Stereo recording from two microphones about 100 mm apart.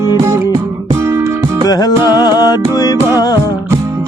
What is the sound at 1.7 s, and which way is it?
Music, 40° left (ahead or behind).